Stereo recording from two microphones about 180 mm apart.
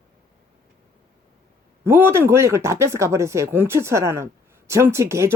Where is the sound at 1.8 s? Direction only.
15° right (ahead or behind).